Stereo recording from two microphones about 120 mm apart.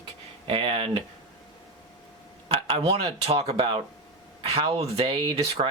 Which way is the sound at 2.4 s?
50° right (ahead or behind).